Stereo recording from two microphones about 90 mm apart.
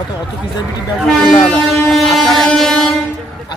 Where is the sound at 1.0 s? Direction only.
5° left (ahead or behind).